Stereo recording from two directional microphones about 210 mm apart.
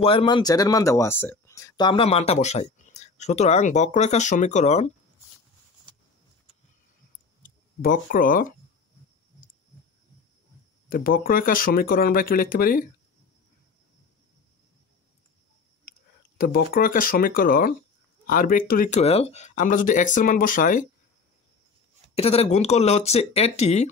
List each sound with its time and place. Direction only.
0.0 s speech: 25° left (ahead or behind)
7.4 s speech: 40° left (ahead or behind)
10.9 s speech: 40° left (ahead or behind)
15.8 s speech: 45° left (ahead or behind)
22.1 s speech: 30° left (ahead or behind)